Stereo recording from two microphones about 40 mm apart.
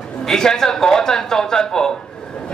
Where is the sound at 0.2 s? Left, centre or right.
Centre.